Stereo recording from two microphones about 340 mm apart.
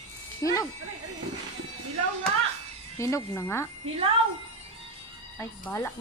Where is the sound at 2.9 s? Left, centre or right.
Centre.